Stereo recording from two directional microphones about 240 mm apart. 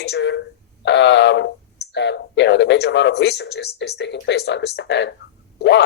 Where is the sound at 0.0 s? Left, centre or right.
Left.